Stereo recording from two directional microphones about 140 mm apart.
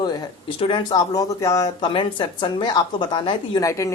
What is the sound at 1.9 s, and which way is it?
A woman's voice, 35° left (ahead or behind).